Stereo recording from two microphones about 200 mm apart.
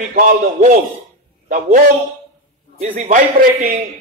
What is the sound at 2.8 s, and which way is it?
Speech, 35° right (ahead or behind).